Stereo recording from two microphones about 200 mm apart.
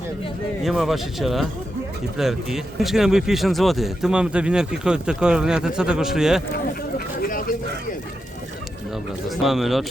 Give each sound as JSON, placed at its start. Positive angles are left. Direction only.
{"t": 0.6, "sound": "speech", "side_deg": 0}
{"t": 7.2, "sound": "a sound", "side_deg": 45}
{"t": 9.3, "sound": "speech", "side_deg": 0}